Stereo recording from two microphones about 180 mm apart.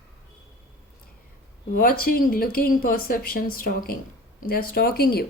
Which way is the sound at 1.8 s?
55° left (ahead or behind).